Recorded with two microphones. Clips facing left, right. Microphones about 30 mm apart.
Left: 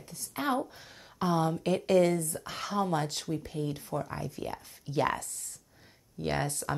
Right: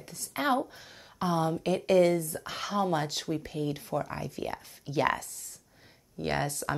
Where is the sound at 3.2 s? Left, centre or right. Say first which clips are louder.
Right 2 dB; right.